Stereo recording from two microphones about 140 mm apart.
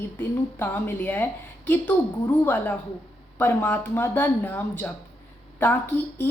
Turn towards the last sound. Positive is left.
turn(degrees=15)  # may be behind; listen again after turning